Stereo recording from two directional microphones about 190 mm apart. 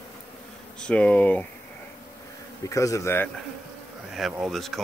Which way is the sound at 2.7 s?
15° left (ahead or behind).